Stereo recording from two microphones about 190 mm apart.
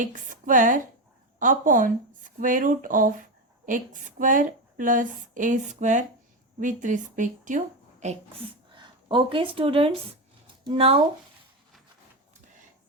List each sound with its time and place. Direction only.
0.0 s a woman's voice: 45° right (ahead or behind)